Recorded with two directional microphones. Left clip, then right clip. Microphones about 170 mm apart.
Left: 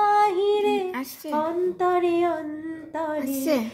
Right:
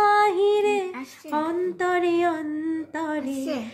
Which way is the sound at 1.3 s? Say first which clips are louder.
Left 1 dB; 50° right (ahead or behind).